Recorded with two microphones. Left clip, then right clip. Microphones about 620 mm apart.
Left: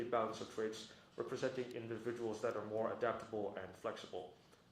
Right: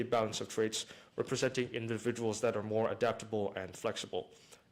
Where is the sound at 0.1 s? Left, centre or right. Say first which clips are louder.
Right 5 dB; right.